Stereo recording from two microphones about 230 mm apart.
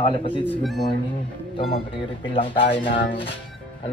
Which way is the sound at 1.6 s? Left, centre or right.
Left.